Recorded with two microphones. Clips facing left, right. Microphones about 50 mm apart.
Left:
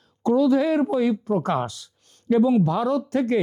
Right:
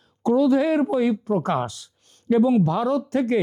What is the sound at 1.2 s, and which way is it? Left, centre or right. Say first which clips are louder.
Speech: even; centre.